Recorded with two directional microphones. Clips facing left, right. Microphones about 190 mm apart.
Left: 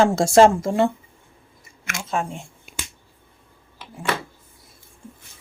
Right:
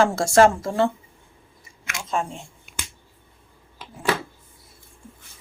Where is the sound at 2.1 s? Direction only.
5° left (ahead or behind).